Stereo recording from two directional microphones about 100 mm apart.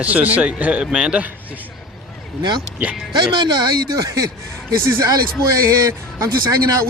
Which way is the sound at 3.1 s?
50° right (ahead or behind).